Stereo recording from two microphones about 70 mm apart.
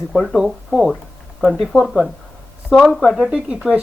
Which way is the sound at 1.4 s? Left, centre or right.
Centre.